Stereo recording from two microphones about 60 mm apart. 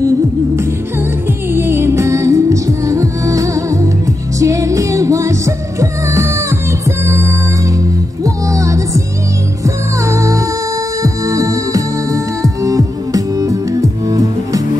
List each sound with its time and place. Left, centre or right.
1.5 s music: right
10.0 s music: right